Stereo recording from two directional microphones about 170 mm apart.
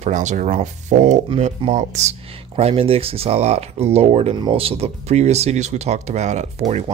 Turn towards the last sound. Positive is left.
turn(degrees=-40)  # may be behind; listen again after turning